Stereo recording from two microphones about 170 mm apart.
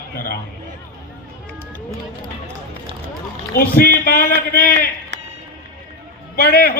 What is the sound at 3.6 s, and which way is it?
Speech, 60° left (ahead or behind).